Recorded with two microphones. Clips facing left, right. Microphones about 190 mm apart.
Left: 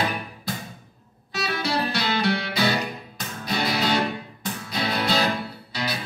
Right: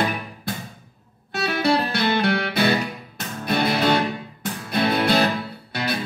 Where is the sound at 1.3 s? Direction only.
55° right (ahead or behind).